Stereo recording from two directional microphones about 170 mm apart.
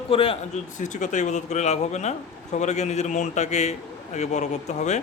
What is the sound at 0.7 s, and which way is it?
Speech, 45° left (ahead or behind).